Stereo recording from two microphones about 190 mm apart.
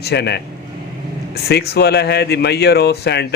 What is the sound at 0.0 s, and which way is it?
Speech, 60° left (ahead or behind).